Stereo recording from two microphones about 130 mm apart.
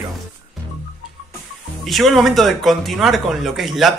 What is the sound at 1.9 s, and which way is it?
Speech, centre (ahead or behind).